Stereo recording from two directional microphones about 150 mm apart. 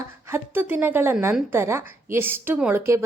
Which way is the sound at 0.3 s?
15° right (ahead or behind).